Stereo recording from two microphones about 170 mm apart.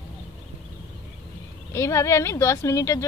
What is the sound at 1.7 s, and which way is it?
A woman's voice, 15° left (ahead or behind).